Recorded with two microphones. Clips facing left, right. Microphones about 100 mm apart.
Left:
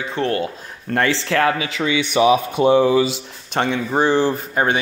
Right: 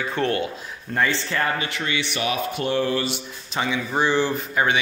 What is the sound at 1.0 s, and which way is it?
Speech, 90° left.